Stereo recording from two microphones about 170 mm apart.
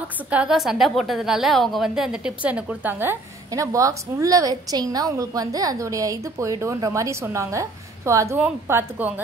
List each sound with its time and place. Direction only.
0.3 s a woman's voice: 5° right (ahead or behind)